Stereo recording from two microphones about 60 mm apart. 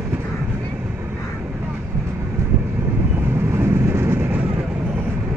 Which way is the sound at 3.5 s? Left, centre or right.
Right.